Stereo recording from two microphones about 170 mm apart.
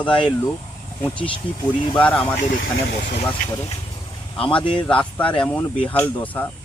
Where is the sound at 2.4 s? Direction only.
50° left (ahead or behind).